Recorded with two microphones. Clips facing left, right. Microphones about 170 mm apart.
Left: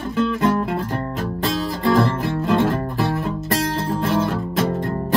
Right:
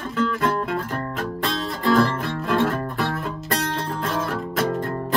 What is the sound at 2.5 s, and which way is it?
Music, 20° left (ahead or behind).